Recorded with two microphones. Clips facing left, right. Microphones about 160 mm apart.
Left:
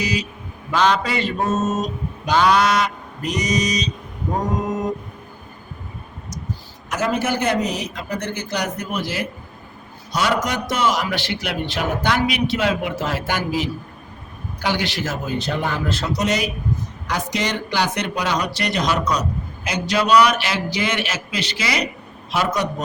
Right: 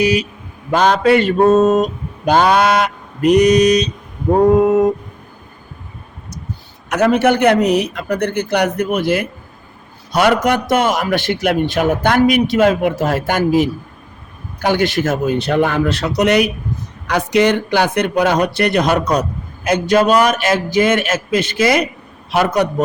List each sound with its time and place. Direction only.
0.0 s a man's voice: 60° right (ahead or behind)
2.2 s goose: 55° right (ahead or behind)
6.9 s a man's voice: 65° right (ahead or behind)